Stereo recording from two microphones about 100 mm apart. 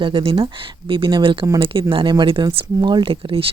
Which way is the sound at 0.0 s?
65° right (ahead or behind).